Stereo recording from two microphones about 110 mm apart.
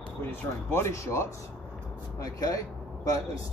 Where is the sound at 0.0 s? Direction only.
20° left (ahead or behind).